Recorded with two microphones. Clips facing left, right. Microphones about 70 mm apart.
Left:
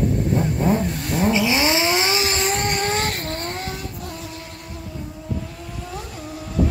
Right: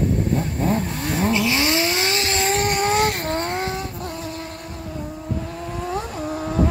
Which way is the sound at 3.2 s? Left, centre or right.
Right.